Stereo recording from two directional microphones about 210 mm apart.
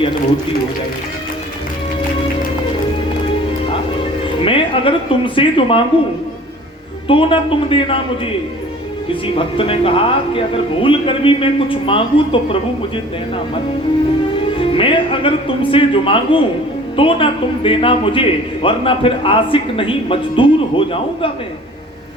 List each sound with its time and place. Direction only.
4.4 s a man's voice: 25° left (ahead or behind)
7.1 s a man's voice: 25° left (ahead or behind)
14.6 s a man's voice: 25° left (ahead or behind)